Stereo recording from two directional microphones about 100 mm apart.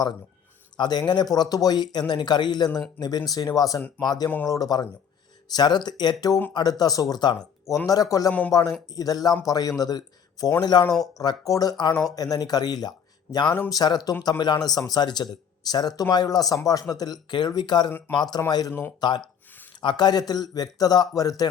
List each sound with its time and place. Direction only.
0.8 s speech: 45° left (ahead or behind)
8.3 s speech: 15° left (ahead or behind)
9.0 s speech: 40° left (ahead or behind)
18.7 s speech: 20° left (ahead or behind)
18.9 s speech: 45° left (ahead or behind)